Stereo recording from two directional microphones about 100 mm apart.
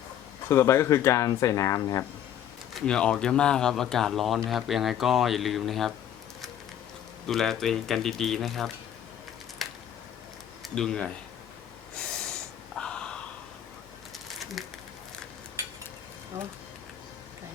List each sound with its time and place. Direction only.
0.4 s speech: 25° left (ahead or behind)
2.7 s speech: 5° left (ahead or behind)
7.3 s speech: 5° left (ahead or behind)
9.6 s a sound: centre (ahead or behind)
10.8 s speech: 5° left (ahead or behind)
11.9 s snort: 5° left (ahead or behind)
12.7 s gasp: 10° left (ahead or behind)
14.3 s a sound: centre (ahead or behind)